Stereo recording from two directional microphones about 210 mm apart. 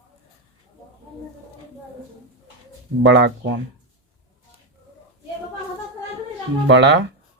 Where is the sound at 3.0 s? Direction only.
55° right (ahead or behind).